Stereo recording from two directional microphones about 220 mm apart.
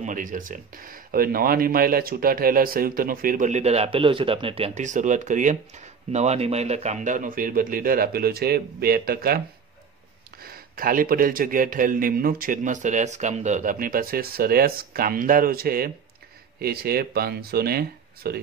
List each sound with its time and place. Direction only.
0.0 s speech: 35° right (ahead or behind)
10.4 s speech: 40° right (ahead or behind)